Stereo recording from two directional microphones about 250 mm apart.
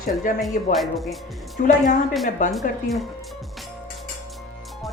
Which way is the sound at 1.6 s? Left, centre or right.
Left.